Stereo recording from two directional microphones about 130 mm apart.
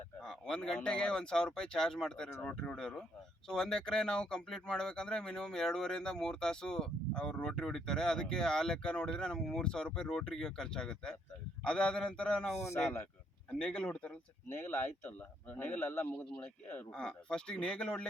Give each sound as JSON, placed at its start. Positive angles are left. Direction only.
{"t": 0.2, "sound": "speech", "side_deg": 5}
{"t": 12.5, "sound": "speech", "side_deg": 20}
{"t": 13.5, "sound": "speech", "side_deg": 10}